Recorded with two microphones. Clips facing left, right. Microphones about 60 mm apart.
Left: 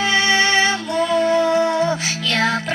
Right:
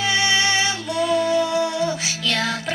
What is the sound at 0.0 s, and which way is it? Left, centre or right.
Music, left.